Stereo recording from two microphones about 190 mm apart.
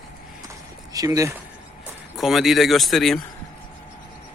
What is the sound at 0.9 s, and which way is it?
Speech, 20° right (ahead or behind).